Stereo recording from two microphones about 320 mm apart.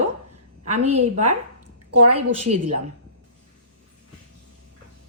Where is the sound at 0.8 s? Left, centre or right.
Right.